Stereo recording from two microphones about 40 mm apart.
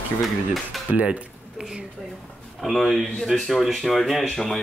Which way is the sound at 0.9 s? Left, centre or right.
Right.